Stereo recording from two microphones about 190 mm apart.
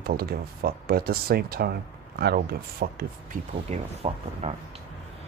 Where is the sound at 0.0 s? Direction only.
50° right (ahead or behind).